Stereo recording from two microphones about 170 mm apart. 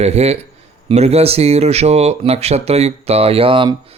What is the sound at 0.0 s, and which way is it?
Speech, 40° right (ahead or behind).